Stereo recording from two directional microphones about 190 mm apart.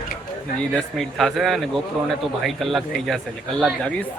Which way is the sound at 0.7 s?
Centre (ahead or behind).